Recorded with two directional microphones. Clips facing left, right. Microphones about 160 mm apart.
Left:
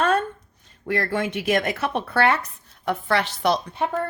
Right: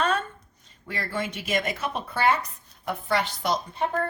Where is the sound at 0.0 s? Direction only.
55° left (ahead or behind).